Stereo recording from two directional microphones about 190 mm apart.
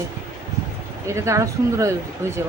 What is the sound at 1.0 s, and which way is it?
Speech, 15° right (ahead or behind).